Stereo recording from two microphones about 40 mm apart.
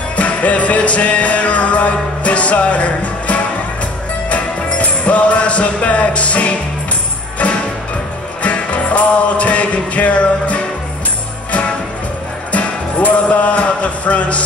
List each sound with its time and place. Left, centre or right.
0.1 s music: left
8.4 s music: left
12.5 s music: left